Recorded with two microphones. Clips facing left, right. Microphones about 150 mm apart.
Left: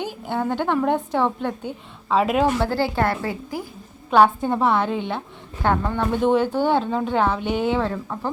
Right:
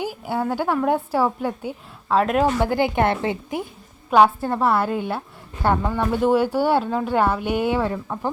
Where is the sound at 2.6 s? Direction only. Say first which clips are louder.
Right 2 dB; 15° right (ahead or behind).